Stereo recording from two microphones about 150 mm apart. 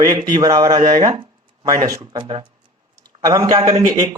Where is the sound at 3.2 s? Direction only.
20° right (ahead or behind).